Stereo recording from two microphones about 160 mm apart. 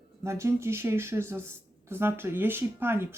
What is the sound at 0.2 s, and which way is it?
Speech, 15° right (ahead or behind).